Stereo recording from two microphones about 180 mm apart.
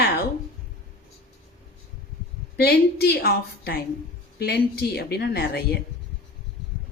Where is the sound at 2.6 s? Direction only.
65° left (ahead or behind).